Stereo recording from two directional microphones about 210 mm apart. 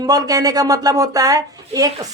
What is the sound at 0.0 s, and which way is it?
A woman's voice, 20° right (ahead or behind).